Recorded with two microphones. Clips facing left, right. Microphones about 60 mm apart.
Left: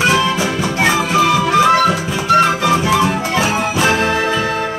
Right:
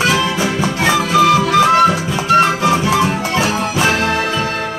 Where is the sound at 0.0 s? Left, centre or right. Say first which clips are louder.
Left 1 dB; left.